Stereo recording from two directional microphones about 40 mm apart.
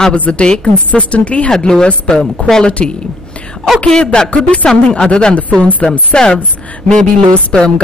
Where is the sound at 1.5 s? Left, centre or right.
Centre.